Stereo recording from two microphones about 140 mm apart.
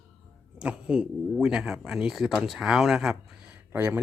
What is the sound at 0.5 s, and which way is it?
Speech, 10° right (ahead or behind).